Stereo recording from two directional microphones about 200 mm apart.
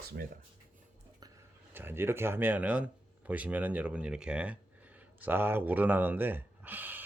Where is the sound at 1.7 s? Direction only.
10° right (ahead or behind).